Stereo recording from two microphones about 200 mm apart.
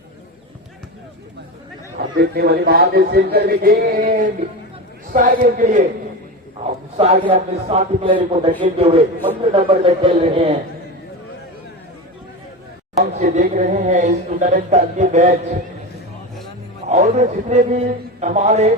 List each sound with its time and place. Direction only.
2.1 s a man's voice: 50° right (ahead or behind); by 10.6 s 30° right (ahead or behind)
13.0 s speech: 35° right (ahead or behind)
16.9 s speech: 35° right (ahead or behind)